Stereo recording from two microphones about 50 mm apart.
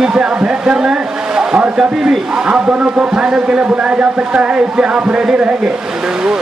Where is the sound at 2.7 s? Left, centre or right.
Right.